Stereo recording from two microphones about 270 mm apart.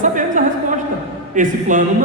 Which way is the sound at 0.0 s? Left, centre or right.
Right.